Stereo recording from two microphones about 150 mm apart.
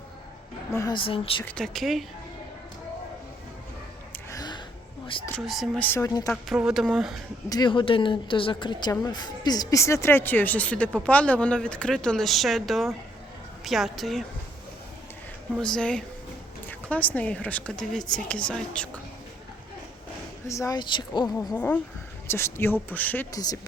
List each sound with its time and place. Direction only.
0.7 s speech: 20° left (ahead or behind)
0.9 s a woman's voice: 35° left (ahead or behind)
1.5 s speech: 5° left (ahead or behind)
4.1 s gasp: 20° left (ahead or behind)
5.4 s speech: centre (ahead or behind)
6.0 s speech: 25° left (ahead or behind)
6.3 s speech: 5° right (ahead or behind)
7.5 s a woman's voice: 30° left (ahead or behind); by 14.3 s centre (ahead or behind)
15.5 s speech: 5° left (ahead or behind)
20.5 s speech: 20° left (ahead or behind)
21.3 s speech: 15° left (ahead or behind)
23.3 s speech: 25° left (ahead or behind)